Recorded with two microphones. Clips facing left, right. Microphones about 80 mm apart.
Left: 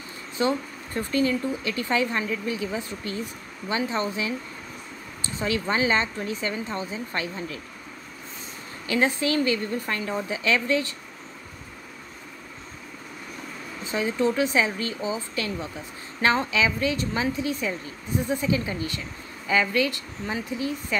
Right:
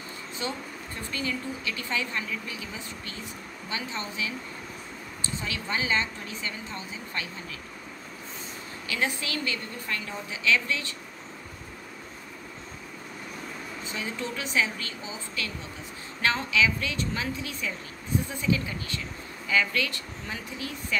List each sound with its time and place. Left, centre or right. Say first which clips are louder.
0.4 s speech: left 10 dB; left
5.4 s speech: left 8 dB; left
8.8 s speech: left 7 dB; left
13.9 s speech: left 11 dB; left